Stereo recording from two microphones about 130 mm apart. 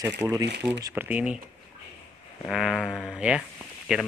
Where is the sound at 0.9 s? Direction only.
10° right (ahead or behind).